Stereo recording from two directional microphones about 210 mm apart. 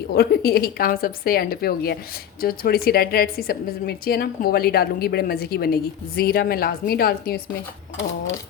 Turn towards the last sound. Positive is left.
turn(degrees=45)  # may be behind; listen again after turning